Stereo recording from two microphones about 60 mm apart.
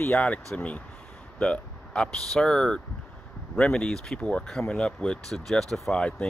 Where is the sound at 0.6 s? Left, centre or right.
Left.